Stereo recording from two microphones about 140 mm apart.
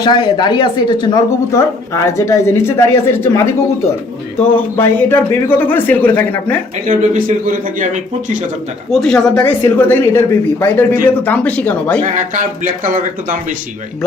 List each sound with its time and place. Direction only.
0.0 s a woman's voice: 35° left (ahead or behind); by 6.6 s 10° left (ahead or behind)
6.8 s speech: 70° right (ahead or behind)
8.9 s a man's voice: 5° left (ahead or behind)
12.1 s speech: 65° right (ahead or behind)